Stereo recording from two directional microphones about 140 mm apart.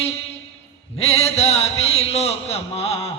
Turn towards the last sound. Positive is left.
turn(degrees=45)  # may be behind; listen again after turning